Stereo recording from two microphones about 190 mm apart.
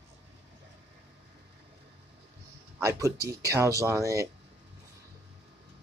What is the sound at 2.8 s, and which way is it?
Speech, 15° right (ahead or behind).